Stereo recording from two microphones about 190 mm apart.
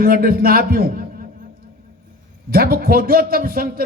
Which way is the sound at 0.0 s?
50° right (ahead or behind).